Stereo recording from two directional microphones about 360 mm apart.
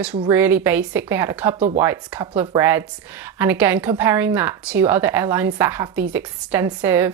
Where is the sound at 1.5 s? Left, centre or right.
Centre.